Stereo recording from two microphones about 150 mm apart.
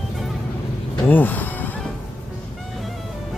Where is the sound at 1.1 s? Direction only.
10° left (ahead or behind).